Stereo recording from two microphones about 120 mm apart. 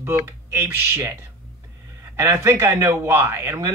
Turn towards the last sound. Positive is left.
turn(degrees=-20)  # may be behind; listen again after turning